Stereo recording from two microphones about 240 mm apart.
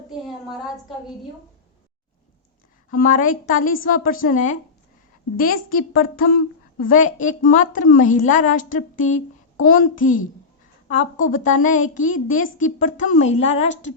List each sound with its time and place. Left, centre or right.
0.1 s a woman's voice: centre
2.9 s a woman's voice: left